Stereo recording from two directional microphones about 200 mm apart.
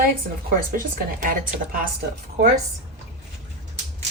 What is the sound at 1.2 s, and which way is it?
Speech, 45° right (ahead or behind).